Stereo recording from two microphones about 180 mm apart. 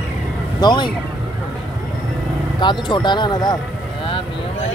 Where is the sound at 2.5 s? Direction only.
25° left (ahead or behind).